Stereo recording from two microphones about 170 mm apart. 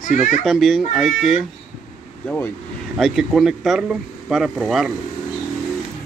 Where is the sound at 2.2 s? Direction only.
10° left (ahead or behind).